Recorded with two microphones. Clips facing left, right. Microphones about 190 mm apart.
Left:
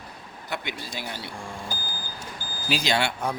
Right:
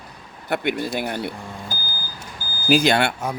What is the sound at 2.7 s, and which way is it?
Speech, 55° right (ahead or behind).